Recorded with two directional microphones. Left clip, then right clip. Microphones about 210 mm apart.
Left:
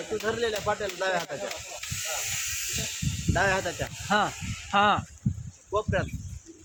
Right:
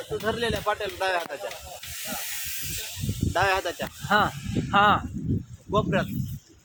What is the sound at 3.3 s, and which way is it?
Speech, 40° right (ahead or behind).